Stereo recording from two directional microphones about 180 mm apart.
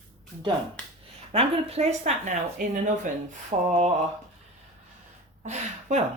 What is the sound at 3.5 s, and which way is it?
Speech, 35° right (ahead or behind).